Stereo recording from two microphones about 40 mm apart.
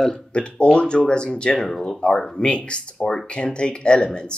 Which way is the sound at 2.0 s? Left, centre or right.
Left.